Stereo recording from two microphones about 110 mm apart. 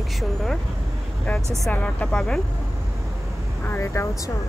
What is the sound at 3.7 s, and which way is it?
Speech, 25° left (ahead or behind).